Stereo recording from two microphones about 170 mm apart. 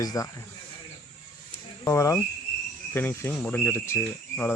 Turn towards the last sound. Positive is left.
turn(degrees=10)  # may be behind; listen again after turning